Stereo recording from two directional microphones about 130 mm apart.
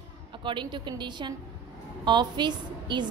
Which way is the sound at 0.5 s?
35° right (ahead or behind).